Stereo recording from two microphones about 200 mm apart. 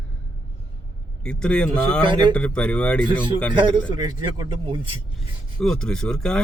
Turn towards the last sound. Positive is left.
turn(degrees=5)  # may be behind; listen again after turning